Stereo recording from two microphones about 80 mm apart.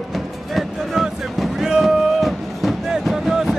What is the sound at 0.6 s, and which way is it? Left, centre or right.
Music, centre.